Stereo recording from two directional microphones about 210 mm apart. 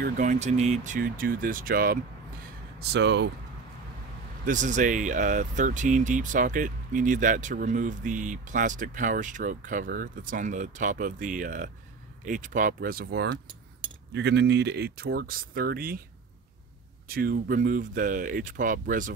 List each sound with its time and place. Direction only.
0.0 s speech: 35° right (ahead or behind)
2.8 s speech: 55° right (ahead or behind)
4.5 s speech: 35° right (ahead or behind)
13.5 s keys jangling: 25° right (ahead or behind)
14.1 s speech: 55° right (ahead or behind)
17.1 s speech: 45° right (ahead or behind)